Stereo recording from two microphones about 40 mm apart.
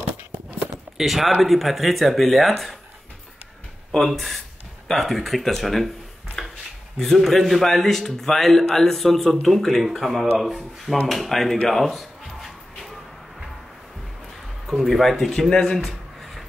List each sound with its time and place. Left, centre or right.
0.9 s a man's voice: centre
4.0 s a man's voice: centre
6.4 s a sound: centre
7.0 s a man's voice: centre
11.7 s a sound: centre
14.7 s a man's voice: centre
15.5 s speech: centre